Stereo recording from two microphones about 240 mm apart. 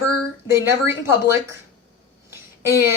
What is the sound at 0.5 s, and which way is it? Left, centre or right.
Speech, centre.